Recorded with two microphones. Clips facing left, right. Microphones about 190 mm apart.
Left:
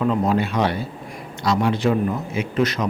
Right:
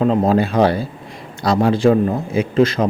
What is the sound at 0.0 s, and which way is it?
A man's voice, 30° right (ahead or behind).